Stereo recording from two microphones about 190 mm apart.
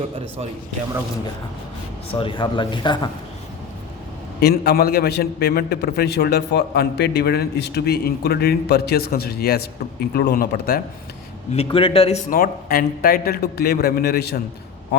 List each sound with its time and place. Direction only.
2.1 s speech: 25° left (ahead or behind)
4.4 s a man's voice: 55° left (ahead or behind)
11.5 s speech: 30° left (ahead or behind)
12.3 s a man's voice: 50° left (ahead or behind)